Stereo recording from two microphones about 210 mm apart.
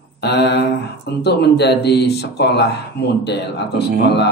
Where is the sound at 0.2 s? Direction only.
55° left (ahead or behind).